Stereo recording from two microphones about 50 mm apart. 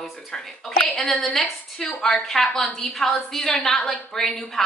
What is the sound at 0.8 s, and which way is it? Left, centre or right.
Speech, left.